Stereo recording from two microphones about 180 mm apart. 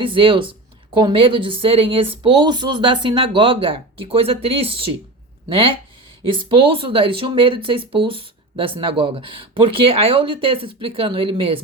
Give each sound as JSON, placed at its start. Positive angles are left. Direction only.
{"t": 0.0, "sound": "speech", "side_deg": -30}